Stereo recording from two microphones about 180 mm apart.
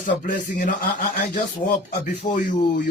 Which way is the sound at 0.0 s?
50° left (ahead or behind).